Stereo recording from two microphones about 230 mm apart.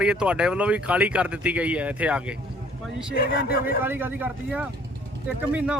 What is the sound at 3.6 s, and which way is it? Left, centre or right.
A man's voice, centre.